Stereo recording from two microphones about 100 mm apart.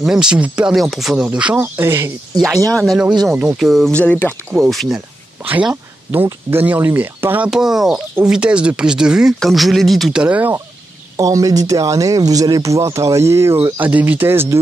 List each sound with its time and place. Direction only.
0.0 s speech: 5° right (ahead or behind)
1.8 s speech: 25° right (ahead or behind)
2.7 s speech: centre (ahead or behind)
3.9 s speech: 15° left (ahead or behind)
4.6 s speech: centre (ahead or behind)
5.4 s speech: 15° right (ahead or behind)
7.5 s speech: 5° right (ahead or behind)
10.2 s speech: 15° right (ahead or behind)
11.1 s speech: 35° right (ahead or behind)